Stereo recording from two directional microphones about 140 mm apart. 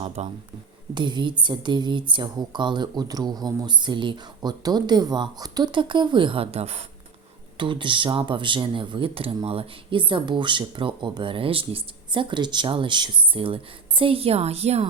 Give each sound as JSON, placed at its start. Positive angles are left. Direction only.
{"t": 0.2, "sound": "speech", "side_deg": -50}
{"t": 0.9, "sound": "speech", "side_deg": -35}
{"t": 7.5, "sound": "speech", "side_deg": -35}